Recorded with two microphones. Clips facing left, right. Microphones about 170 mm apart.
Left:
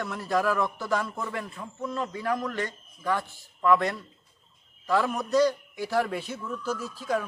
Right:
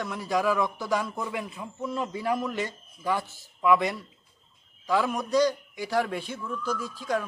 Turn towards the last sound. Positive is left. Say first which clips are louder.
# even
turn(degrees=5)  # may be behind; listen again after turning